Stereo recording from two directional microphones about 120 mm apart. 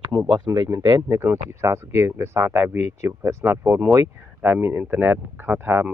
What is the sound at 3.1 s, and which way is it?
Speech, 20° right (ahead or behind).